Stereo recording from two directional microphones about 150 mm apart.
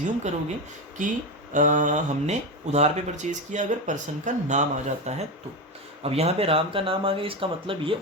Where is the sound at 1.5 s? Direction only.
60° right (ahead or behind).